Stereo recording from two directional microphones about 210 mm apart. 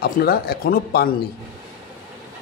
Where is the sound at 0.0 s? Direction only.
45° left (ahead or behind).